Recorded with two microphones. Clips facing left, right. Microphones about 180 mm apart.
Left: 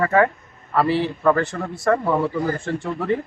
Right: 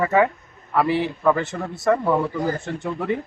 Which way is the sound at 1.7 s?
20° right (ahead or behind).